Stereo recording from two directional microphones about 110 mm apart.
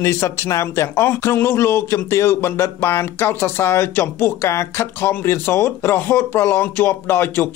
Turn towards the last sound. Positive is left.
turn(degrees=20)  # may be behind; listen again after turning